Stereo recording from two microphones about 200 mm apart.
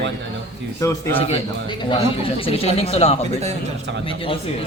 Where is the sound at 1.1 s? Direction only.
30° left (ahead or behind).